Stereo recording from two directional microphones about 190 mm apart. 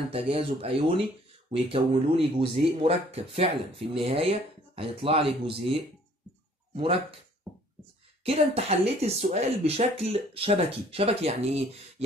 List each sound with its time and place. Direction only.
0.1 s speech: 30° right (ahead or behind)
8.2 s speech: 30° right (ahead or behind)